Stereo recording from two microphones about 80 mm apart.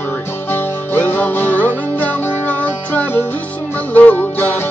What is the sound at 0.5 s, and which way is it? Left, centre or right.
Music, left.